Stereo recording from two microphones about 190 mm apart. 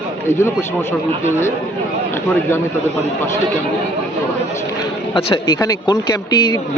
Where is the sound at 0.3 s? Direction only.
15° left (ahead or behind).